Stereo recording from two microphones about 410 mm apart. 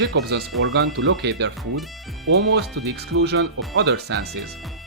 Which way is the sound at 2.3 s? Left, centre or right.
Right.